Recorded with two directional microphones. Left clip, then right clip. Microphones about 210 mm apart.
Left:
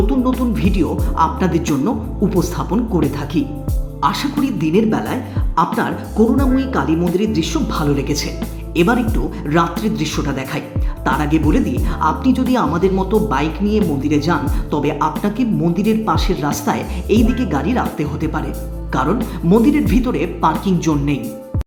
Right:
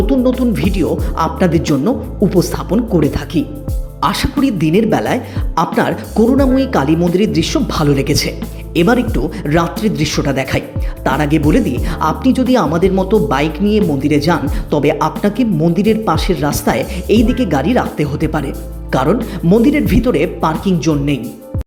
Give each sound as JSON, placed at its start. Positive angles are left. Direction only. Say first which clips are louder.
{"t": 0.5, "sound": "speech", "louder": "right 3 dB", "side_deg": -15}